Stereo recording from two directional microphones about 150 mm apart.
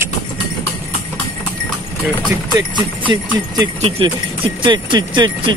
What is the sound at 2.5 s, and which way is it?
Speech, 30° right (ahead or behind).